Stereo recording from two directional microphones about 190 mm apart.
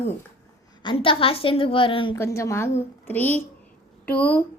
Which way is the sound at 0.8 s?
30° left (ahead or behind).